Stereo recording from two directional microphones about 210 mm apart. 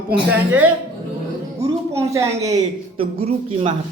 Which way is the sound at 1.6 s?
15° right (ahead or behind).